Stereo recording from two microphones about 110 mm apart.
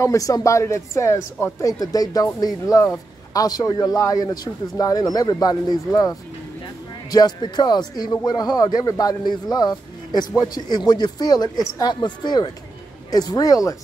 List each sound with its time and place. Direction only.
0.0 s speech: 30° left (ahead or behind)
7.1 s speech: 40° left (ahead or behind)